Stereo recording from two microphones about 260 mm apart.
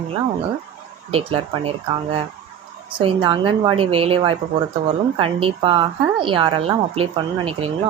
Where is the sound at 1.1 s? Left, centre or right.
Right.